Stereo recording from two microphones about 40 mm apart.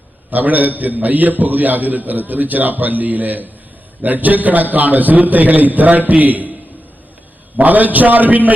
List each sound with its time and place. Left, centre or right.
0.3 s a man's voice: right
7.5 s a man's voice: right